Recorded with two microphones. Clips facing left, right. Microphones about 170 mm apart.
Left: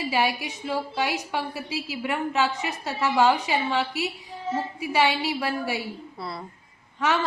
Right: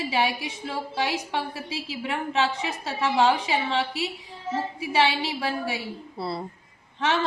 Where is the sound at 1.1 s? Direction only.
30° right (ahead or behind).